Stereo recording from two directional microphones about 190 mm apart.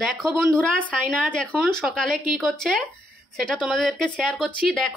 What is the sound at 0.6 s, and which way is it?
A woman's voice, 5° left (ahead or behind).